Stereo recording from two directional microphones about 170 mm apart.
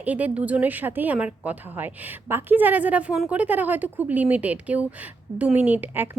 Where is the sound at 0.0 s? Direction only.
10° right (ahead or behind).